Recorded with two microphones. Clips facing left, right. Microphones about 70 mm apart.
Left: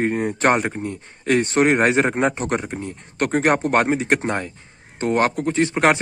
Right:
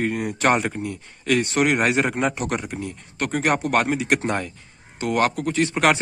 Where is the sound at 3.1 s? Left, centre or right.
Left.